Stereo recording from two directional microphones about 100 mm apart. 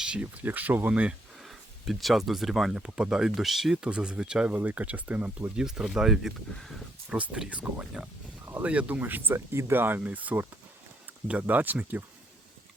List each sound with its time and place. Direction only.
0.0 s speech: 10° right (ahead or behind)
1.4 s speech: centre (ahead or behind)
7.1 s speech: 10° right (ahead or behind)
8.4 s speech: 20° right (ahead or behind)